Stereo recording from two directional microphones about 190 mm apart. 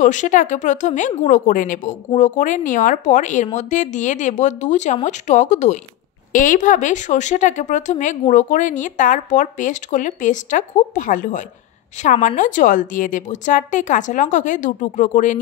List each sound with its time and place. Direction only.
0.0 s speech: 40° left (ahead or behind)